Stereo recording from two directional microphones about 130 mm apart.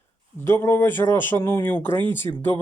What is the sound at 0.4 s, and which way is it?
Speech, 20° left (ahead or behind).